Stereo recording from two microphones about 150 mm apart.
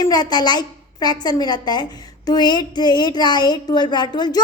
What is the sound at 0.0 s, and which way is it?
A woman's voice, 25° left (ahead or behind).